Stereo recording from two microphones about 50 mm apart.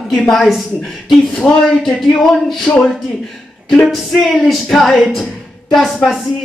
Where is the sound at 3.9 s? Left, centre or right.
Centre.